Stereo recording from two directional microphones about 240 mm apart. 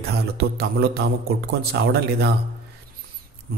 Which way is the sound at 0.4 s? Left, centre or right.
Right.